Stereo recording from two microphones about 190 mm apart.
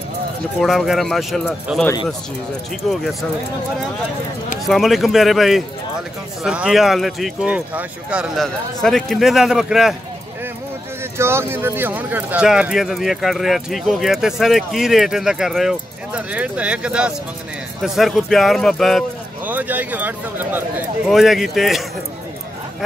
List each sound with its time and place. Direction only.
0.6 s speech: centre (ahead or behind)
4.6 s speech: centre (ahead or behind)
11.1 s speech: 15° right (ahead or behind)
19.4 s speech: 10° right (ahead or behind)